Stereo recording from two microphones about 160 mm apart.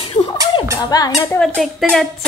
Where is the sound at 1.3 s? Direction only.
5° left (ahead or behind).